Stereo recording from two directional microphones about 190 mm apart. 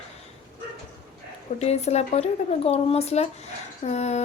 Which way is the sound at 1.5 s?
35° left (ahead or behind).